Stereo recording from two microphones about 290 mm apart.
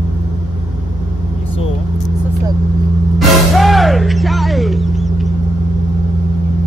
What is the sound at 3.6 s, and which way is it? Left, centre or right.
Music, centre.